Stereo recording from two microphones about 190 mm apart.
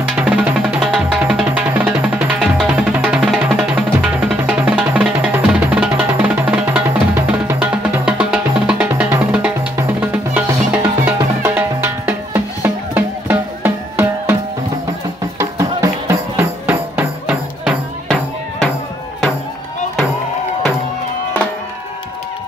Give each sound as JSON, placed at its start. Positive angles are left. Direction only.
{"t": 0.2, "sound": "music", "side_deg": -5}
{"t": 10.3, "sound": "drum", "side_deg": -10}
{"t": 11.1, "sound": "music", "side_deg": -15}
{"t": 15.3, "sound": "music", "side_deg": -15}
{"t": 17.6, "sound": "music", "side_deg": 0}